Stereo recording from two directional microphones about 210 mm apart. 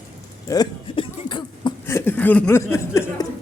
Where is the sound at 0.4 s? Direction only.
20° left (ahead or behind).